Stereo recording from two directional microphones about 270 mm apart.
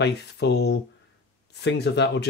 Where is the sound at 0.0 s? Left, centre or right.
Left.